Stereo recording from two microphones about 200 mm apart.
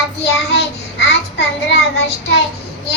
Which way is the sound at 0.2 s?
60° left (ahead or behind).